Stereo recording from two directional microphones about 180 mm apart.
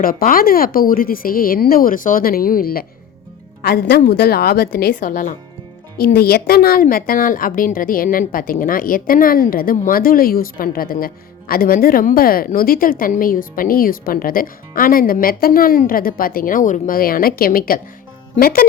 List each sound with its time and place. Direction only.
0.0 s a woman's voice: 50° left (ahead or behind)
6.0 s a woman's voice: 55° left (ahead or behind)